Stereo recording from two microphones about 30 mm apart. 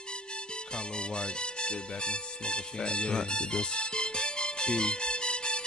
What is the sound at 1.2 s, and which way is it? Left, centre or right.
Speech, left.